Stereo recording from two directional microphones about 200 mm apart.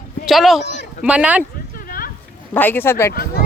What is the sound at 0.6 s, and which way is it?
Speech, 60° left (ahead or behind).